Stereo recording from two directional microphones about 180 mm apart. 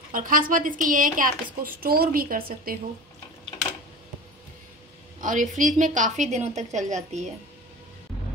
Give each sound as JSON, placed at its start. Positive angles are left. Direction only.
{"t": 0.1, "sound": "a woman's voice", "side_deg": -50}
{"t": 5.2, "sound": "a woman's voice", "side_deg": -45}